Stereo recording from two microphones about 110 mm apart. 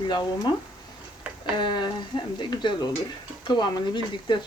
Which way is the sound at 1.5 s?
45° left (ahead or behind).